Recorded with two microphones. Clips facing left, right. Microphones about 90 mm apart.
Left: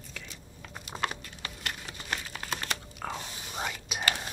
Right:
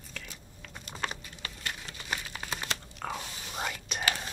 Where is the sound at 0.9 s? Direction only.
25° left (ahead or behind).